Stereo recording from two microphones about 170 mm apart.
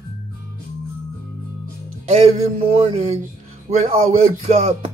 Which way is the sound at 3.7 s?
40° right (ahead or behind).